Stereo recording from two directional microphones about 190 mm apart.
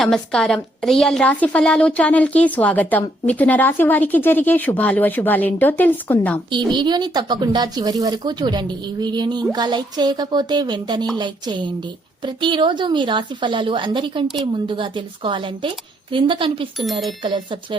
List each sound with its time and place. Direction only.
0.0 s a woman's voice: 5° left (ahead or behind)
6.5 s a woman's voice: 25° right (ahead or behind)